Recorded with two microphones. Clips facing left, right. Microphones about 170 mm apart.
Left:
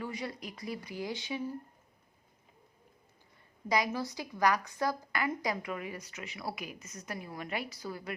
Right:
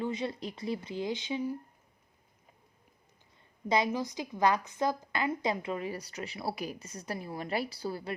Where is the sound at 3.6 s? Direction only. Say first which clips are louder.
Right 2 dB; 25° right (ahead or behind).